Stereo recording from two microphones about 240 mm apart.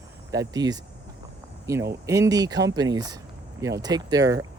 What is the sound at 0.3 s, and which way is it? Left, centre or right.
Speech, centre.